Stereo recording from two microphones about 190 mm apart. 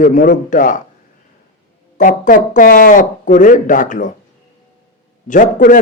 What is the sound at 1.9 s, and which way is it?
A man's voice, 45° left (ahead or behind).